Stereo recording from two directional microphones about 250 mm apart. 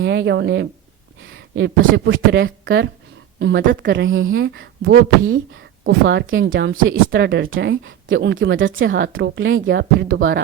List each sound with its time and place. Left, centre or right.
0.0 s speech: right